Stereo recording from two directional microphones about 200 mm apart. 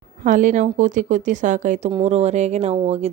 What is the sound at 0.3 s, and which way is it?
Speech, 40° right (ahead or behind).